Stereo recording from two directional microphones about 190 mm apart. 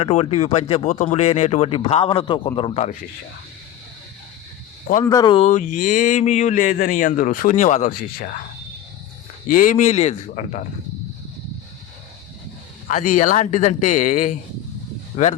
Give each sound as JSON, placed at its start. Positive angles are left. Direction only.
{"t": 0.0, "sound": "speech", "side_deg": 35}
{"t": 5.0, "sound": "speech", "side_deg": 20}
{"t": 9.5, "sound": "speech", "side_deg": 45}
{"t": 12.9, "sound": "speech", "side_deg": 45}